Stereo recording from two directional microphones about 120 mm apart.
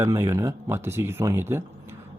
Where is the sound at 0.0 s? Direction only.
25° right (ahead or behind).